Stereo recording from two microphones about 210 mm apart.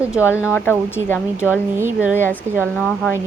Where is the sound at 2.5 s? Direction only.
35° right (ahead or behind).